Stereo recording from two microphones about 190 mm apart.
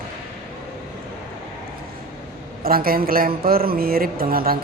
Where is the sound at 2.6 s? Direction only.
50° right (ahead or behind).